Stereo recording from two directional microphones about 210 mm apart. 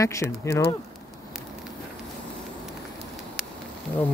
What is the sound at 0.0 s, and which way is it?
Speech, 15° left (ahead or behind).